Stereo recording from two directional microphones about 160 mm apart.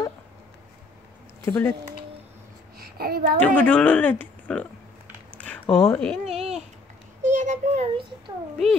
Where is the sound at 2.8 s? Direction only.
70° right (ahead or behind).